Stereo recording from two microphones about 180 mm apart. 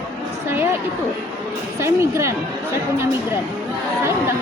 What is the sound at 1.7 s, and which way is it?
Speech, 15° right (ahead or behind).